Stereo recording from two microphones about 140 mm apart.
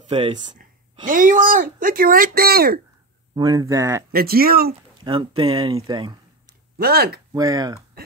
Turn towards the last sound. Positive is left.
turn(degrees=-25)  # may be behind; listen again after turning